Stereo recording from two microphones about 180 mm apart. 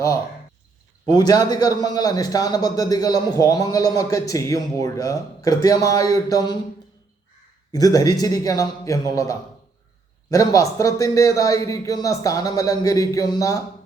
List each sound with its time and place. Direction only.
1.0 s a man's voice: 20° left (ahead or behind)
7.7 s a man's voice: 20° left (ahead or behind)